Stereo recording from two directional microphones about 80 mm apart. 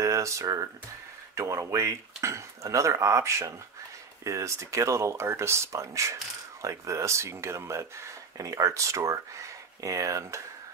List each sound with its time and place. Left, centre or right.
0.0 s speech: right